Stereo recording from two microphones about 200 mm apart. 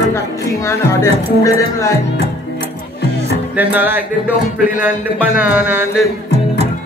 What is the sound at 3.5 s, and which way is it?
Speech, 10° right (ahead or behind).